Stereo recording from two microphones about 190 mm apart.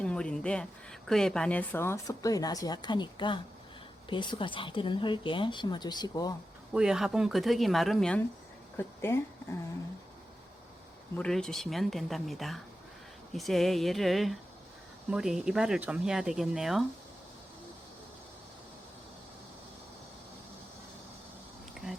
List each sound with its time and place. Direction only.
0.0 s a woman's voice: 5° left (ahead or behind); by 6.3 s 20° left (ahead or behind)
6.7 s speech: 5° right (ahead or behind)
8.8 s speech: 15° left (ahead or behind)
11.2 s speech: 5° left (ahead or behind)